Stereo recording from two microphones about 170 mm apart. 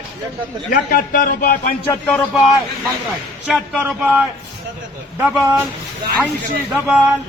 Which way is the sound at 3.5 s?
5° right (ahead or behind).